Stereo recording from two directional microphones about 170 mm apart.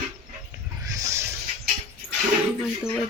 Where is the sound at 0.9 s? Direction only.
20° right (ahead or behind).